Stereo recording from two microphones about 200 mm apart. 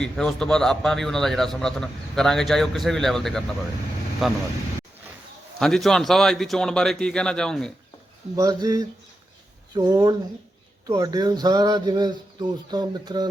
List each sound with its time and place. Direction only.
0.0 s a man's voice: 5° left (ahead or behind)
5.5 s a man's voice: 5° left (ahead or behind)
8.4 s a sound: 15° right (ahead or behind)
9.7 s speech: 20° right (ahead or behind)